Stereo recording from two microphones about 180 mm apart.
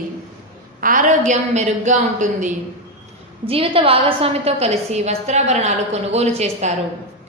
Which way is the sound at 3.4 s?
30° right (ahead or behind).